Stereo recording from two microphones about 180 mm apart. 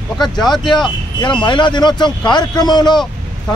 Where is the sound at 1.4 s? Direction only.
25° left (ahead or behind).